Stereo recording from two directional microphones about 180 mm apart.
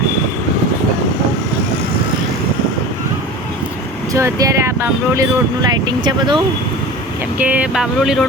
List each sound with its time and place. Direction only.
4.1 s speech: 20° right (ahead or behind)
7.3 s speech: 10° right (ahead or behind)